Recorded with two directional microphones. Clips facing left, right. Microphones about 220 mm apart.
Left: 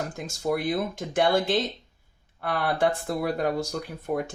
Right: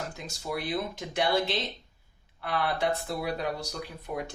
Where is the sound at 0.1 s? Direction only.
50° left (ahead or behind).